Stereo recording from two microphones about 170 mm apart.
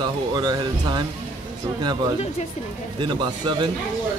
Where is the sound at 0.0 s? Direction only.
25° right (ahead or behind).